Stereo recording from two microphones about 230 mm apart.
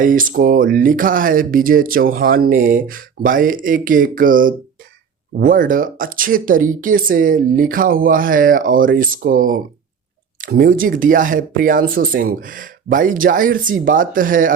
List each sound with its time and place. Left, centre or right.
0.0 s speech: right